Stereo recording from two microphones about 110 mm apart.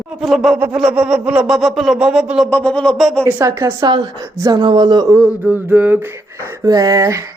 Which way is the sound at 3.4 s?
30° right (ahead or behind).